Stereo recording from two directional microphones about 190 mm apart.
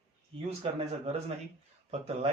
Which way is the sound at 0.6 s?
30° right (ahead or behind).